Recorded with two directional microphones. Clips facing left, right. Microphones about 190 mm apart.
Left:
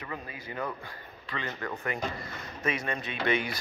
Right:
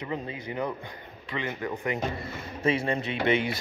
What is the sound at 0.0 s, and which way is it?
Speech, 20° right (ahead or behind).